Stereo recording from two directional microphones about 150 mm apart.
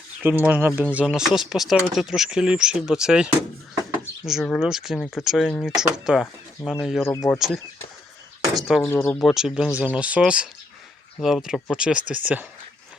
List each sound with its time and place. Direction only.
0.2 s speech: 10° right (ahead or behind)
4.3 s speech: centre (ahead or behind)
7.0 s speech: 20° left (ahead or behind)
7.3 s speech: centre (ahead or behind)
8.6 s speech: centre (ahead or behind)
8.9 s speech: 15° left (ahead or behind)
9.1 s speech: centre (ahead or behind)